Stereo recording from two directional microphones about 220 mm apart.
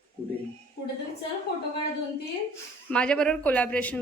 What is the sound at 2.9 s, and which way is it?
A woman's voice, 5° left (ahead or behind).